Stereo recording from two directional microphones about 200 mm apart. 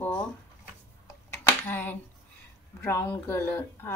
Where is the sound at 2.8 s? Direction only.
15° left (ahead or behind).